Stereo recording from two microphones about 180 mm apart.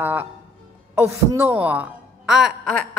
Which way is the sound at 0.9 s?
15° right (ahead or behind).